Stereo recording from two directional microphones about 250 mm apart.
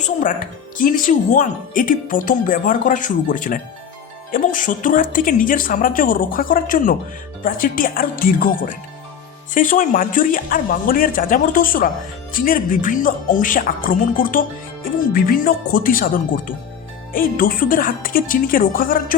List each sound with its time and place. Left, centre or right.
0.0 s speech: left